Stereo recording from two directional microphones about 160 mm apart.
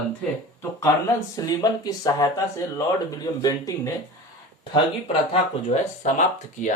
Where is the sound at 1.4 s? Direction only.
25° left (ahead or behind).